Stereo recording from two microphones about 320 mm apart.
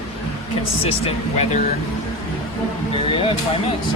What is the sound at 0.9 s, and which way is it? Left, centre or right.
Speech, centre.